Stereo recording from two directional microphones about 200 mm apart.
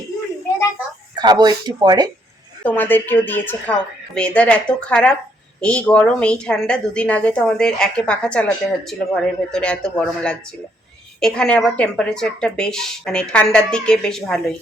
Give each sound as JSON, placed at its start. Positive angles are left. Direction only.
{"t": 1.1, "sound": "speech", "side_deg": -20}
{"t": 2.6, "sound": "a woman's voice", "side_deg": 10}